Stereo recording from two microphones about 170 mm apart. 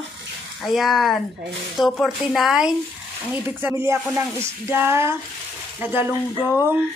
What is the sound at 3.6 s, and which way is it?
Speech, 15° right (ahead or behind).